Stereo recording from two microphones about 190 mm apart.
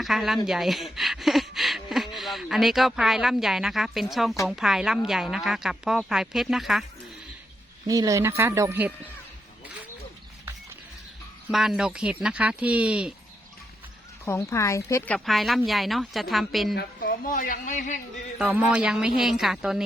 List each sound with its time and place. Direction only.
0.0 s speech: centre (ahead or behind)
7.9 s speech: 20° right (ahead or behind)
11.5 s speech: centre (ahead or behind)
14.3 s speech: 15° left (ahead or behind)
16.7 s speech: 50° left (ahead or behind)
18.3 s speech: 5° right (ahead or behind)